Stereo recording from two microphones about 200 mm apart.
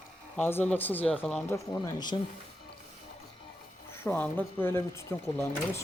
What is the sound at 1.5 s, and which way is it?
Speech, 20° left (ahead or behind).